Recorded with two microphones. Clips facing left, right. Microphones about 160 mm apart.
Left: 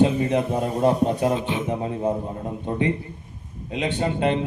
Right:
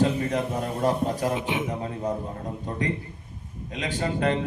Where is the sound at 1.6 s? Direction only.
25° left (ahead or behind).